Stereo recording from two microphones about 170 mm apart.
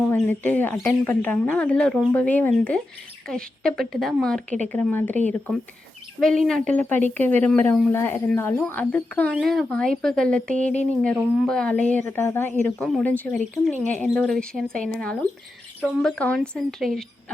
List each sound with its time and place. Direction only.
0.1 s a woman's voice: 10° left (ahead or behind)
6.1 s speech: centre (ahead or behind)
13.4 s speech: 45° right (ahead or behind)
14.0 s a woman's voice: centre (ahead or behind)